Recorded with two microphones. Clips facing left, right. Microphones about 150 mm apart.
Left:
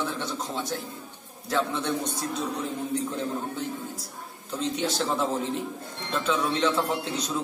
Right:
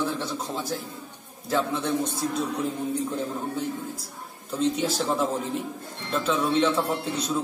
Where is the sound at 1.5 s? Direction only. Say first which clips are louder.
Right 2 dB; 5° right (ahead or behind).